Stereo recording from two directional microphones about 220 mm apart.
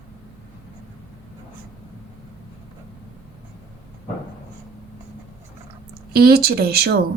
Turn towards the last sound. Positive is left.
turn(degrees=-45)  # may be behind; listen again after turning